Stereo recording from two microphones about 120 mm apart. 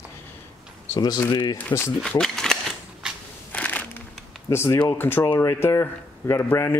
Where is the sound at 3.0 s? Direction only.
5° right (ahead or behind).